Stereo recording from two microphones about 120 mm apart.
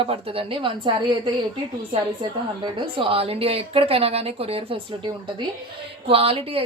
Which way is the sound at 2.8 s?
45° right (ahead or behind).